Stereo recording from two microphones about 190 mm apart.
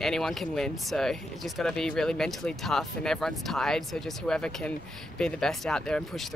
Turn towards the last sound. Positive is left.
turn(degrees=5)  # may be behind; listen again after turning